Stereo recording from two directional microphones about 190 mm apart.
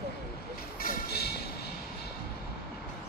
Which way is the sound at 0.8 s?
55° left (ahead or behind).